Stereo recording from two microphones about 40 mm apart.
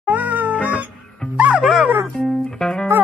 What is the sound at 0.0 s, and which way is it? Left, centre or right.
Cat, right.